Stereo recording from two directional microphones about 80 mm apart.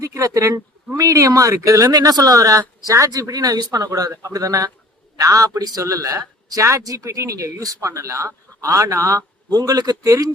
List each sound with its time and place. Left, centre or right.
0.0 s a man's voice: right